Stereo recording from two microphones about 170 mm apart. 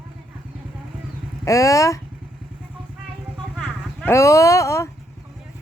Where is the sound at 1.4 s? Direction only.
20° left (ahead or behind).